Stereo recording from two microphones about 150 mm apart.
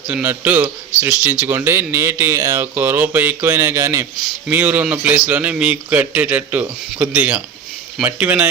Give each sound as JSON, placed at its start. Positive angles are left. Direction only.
{"t": 0.1, "sound": "speech", "side_deg": -10}